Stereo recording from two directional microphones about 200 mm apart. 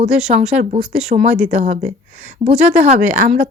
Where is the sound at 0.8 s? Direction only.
5° right (ahead or behind).